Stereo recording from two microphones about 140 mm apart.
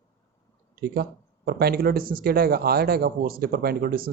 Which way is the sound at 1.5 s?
90° right.